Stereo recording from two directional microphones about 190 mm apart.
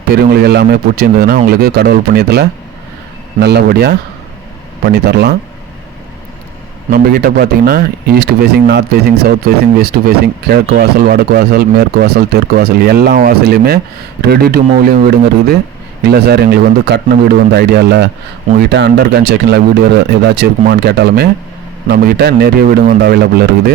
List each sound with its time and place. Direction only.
0.1 s speech: 55° right (ahead or behind)
6.9 s speech: 50° right (ahead or behind)